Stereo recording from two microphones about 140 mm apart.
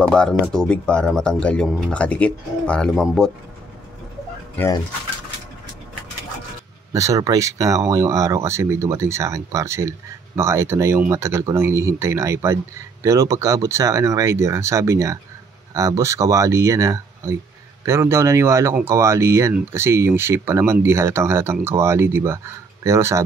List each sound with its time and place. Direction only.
0.1 s speech: 5° left (ahead or behind)
6.9 s speech: 25° right (ahead or behind)